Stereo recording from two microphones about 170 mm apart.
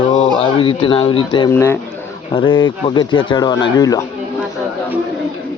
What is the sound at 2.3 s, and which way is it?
Speech, 30° left (ahead or behind).